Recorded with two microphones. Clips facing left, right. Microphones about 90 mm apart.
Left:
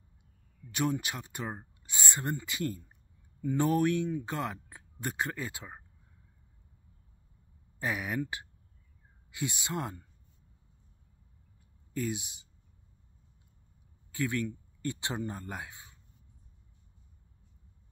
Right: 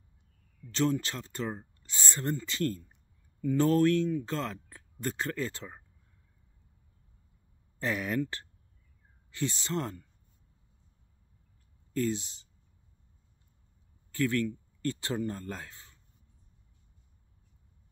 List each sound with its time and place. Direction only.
0.7 s speech: 15° left (ahead or behind)
7.8 s speech: 10° left (ahead or behind)
11.9 s speech: 15° left (ahead or behind)
14.1 s speech: 15° left (ahead or behind)